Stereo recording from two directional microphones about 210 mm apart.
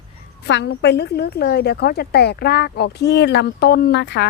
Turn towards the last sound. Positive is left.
turn(degrees=55)  # may be behind; listen again after turning